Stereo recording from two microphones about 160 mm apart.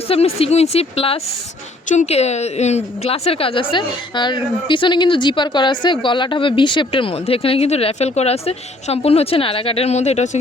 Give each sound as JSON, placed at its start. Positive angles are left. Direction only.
{"t": 0.1, "sound": "a woman's voice", "side_deg": 40}